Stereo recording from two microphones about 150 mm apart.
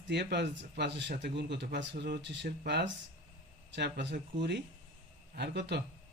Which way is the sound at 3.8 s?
90° right.